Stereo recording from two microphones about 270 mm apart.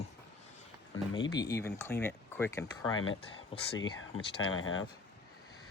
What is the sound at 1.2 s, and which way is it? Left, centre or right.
Speech, centre.